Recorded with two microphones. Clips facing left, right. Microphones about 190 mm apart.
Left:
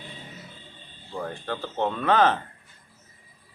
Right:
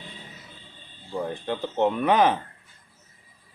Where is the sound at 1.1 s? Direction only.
20° right (ahead or behind).